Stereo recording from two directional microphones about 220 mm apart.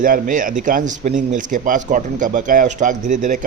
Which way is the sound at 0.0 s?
35° right (ahead or behind).